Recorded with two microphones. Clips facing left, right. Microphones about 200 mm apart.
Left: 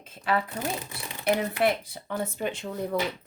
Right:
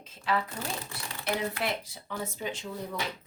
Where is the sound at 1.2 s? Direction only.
55° left (ahead or behind).